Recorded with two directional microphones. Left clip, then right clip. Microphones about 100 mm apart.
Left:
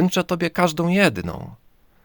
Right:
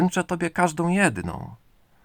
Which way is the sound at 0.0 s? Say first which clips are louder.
Left 3 dB; 30° left (ahead or behind).